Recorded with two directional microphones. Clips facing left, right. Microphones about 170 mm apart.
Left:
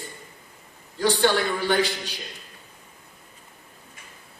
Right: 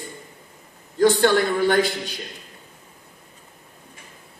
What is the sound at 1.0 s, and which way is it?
Speech, 50° right (ahead or behind).